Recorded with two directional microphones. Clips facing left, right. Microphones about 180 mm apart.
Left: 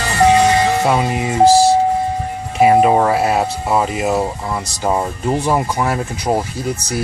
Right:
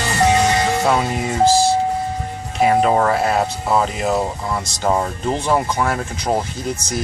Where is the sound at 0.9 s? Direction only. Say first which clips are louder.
Left 2 dB; 10° left (ahead or behind).